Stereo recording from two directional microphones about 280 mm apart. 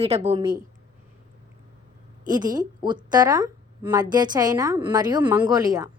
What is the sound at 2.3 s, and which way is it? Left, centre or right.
A woman's voice, centre.